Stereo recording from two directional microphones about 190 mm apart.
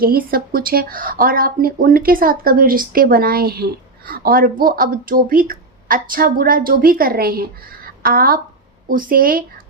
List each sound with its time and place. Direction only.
0.0 s speech: 50° right (ahead or behind)
7.9 s a sound: 50° right (ahead or behind)
8.9 s speech: 45° right (ahead or behind)